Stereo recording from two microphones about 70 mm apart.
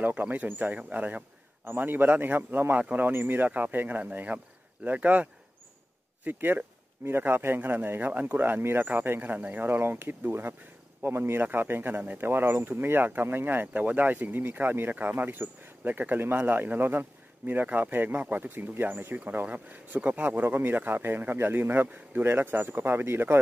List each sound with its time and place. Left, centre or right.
0.0 s speech: right